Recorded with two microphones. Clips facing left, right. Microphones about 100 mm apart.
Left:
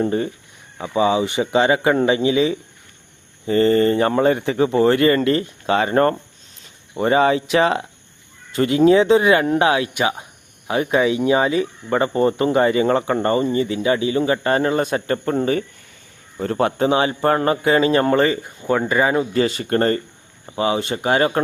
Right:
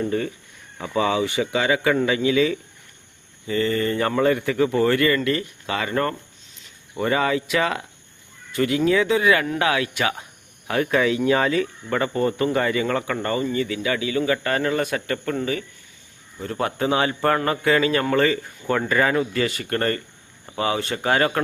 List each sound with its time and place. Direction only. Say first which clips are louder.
0.8 s speech: left 4 dB; 20° left (ahead or behind)
3.4 s speech: left 7 dB; 40° left (ahead or behind)
6.9 s speech: left 5 dB; 25° left (ahead or behind)